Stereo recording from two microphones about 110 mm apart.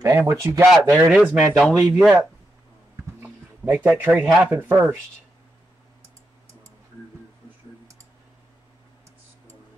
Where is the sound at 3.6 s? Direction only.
20° right (ahead or behind).